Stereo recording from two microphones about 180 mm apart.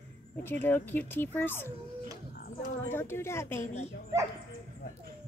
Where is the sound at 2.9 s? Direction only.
15° left (ahead or behind).